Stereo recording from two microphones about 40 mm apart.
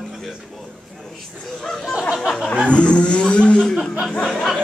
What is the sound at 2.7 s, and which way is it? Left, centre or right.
Speech, left.